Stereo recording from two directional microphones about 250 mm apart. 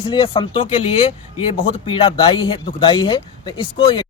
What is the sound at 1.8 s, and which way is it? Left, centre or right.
Speech, left.